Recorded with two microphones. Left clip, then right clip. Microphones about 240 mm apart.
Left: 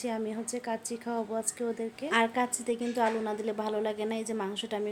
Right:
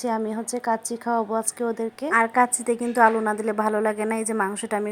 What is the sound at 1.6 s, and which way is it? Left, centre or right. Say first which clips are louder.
A woman's voice: right 7 dB; centre.